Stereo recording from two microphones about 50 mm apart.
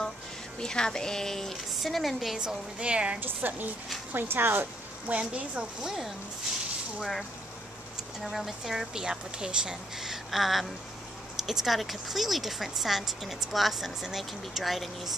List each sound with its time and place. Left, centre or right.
0.6 s speech: centre
2.3 s a woman's voice: centre
3.2 s a woman's voice: right
5.0 s speech: right
8.2 s speech: centre